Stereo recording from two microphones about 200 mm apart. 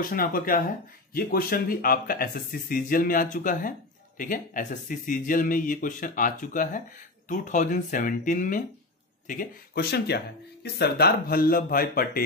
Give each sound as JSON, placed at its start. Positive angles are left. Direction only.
{"t": 0.0, "sound": "speech", "side_deg": 45}